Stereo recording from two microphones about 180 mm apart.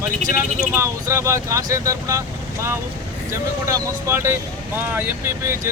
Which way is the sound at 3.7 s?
15° right (ahead or behind).